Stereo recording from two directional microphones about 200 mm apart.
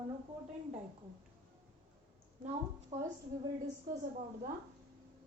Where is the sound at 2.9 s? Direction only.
15° right (ahead or behind).